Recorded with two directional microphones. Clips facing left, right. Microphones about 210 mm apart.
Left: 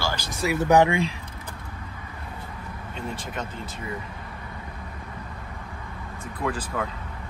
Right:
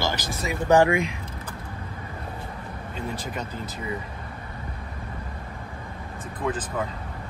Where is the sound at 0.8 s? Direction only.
30° left (ahead or behind).